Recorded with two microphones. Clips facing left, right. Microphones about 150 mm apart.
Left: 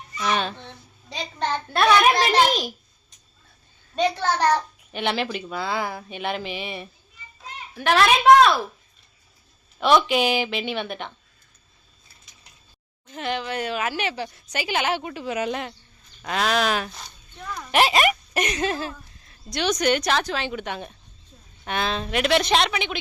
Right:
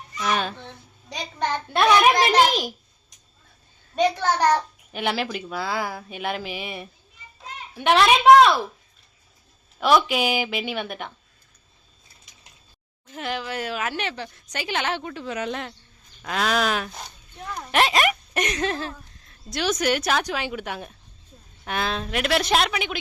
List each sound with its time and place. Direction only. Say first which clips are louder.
0.2 s babbling: even; 5° right (ahead or behind)
1.1 s a child's voice: even; 10° right (ahead or behind)
3.9 s a child's voice: right 1 dB; 15° right (ahead or behind)
7.8 s a woman's voice: right 1 dB; 20° right (ahead or behind)
9.8 s a child's voice: left 1 dB; 5° right (ahead or behind)
13.1 s a woman's voice: left 2 dB; centre (ahead or behind)
17.0 s a sound: right 2 dB; 30° right (ahead or behind)
17.7 s speech: left 1 dB; 5° left (ahead or behind)